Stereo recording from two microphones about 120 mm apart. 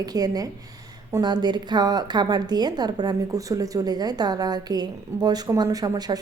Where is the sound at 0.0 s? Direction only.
35° right (ahead or behind).